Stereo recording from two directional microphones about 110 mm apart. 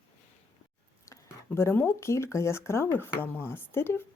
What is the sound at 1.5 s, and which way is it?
Speech, 20° left (ahead or behind).